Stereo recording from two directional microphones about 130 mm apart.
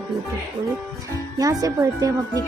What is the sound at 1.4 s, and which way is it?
Speech, 25° right (ahead or behind).